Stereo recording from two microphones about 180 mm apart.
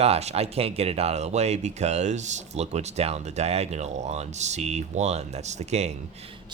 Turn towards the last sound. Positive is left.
turn(degrees=-40)  # may be behind; listen again after turning